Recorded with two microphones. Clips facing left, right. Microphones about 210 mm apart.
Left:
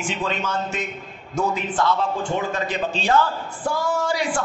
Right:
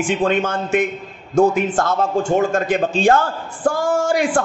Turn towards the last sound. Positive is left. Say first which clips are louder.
# right 6 dB
turn(degrees=-50)  # may be behind; listen again after turning